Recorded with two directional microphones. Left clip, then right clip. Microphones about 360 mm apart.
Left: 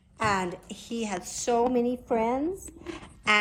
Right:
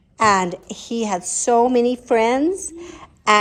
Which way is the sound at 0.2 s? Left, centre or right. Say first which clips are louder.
Right 11 dB; centre.